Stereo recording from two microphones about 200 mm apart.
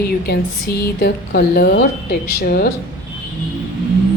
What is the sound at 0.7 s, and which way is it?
A woman's voice, 55° left (ahead or behind).